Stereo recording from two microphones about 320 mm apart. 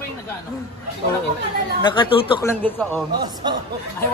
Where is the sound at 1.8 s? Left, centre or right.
Centre.